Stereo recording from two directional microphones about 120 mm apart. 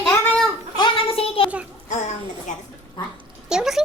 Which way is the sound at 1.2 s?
50° left (ahead or behind).